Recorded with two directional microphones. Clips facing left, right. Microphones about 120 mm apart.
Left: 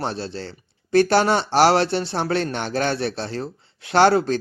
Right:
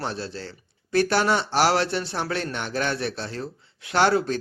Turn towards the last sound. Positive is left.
turn(degrees=30)  # may be behind; listen again after turning